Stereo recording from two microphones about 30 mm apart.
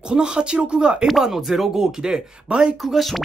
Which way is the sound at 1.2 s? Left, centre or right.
Centre.